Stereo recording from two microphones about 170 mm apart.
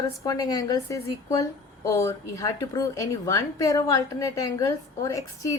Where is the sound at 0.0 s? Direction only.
20° left (ahead or behind).